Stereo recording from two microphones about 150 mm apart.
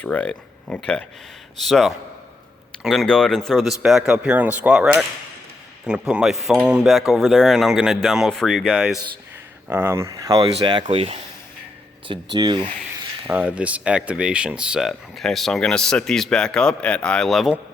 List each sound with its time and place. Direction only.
0.0 s speech: 10° left (ahead or behind)
9.6 s speech: 15° right (ahead or behind)
13.2 s speech: 10° right (ahead or behind)